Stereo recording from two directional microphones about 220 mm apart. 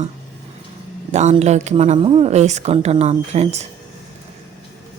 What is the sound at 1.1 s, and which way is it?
Speech, 30° right (ahead or behind).